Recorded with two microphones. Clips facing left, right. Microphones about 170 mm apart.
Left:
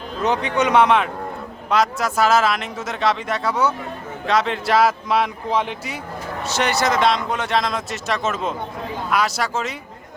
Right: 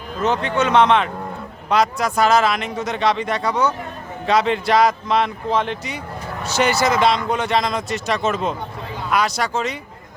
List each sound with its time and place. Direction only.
0.2 s speech: 15° left (ahead or behind)
6.5 s speech: centre (ahead or behind)